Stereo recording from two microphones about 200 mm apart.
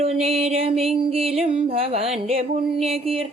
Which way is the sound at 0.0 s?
30° right (ahead or behind).